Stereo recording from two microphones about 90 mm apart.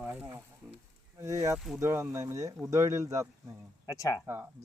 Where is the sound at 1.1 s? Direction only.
40° right (ahead or behind).